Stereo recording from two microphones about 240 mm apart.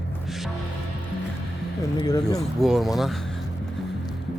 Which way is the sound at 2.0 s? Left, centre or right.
Centre.